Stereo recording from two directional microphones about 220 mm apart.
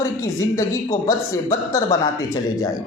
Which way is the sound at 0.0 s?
15° left (ahead or behind).